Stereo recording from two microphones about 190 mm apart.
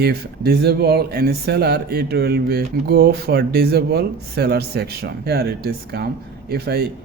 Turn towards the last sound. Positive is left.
turn(degrees=-55)  # may be behind; listen again after turning